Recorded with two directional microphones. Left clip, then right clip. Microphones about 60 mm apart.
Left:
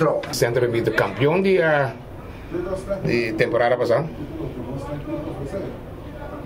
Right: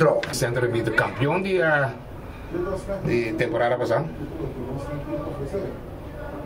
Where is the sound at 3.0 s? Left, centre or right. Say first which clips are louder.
Left 3 dB; centre.